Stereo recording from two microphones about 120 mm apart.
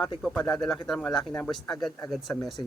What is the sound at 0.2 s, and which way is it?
Speech, 5° left (ahead or behind).